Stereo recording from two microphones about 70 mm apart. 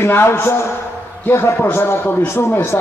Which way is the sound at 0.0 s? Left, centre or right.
Left.